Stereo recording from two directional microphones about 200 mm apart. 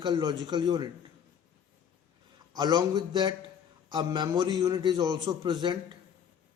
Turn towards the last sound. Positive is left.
turn(degrees=-20)  # may be behind; listen again after turning